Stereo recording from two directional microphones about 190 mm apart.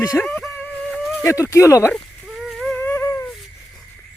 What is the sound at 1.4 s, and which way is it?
Speech, 15° left (ahead or behind).